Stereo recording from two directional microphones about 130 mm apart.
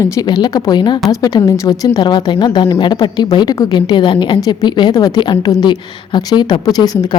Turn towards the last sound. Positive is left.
turn(degrees=30)  # may be behind; listen again after turning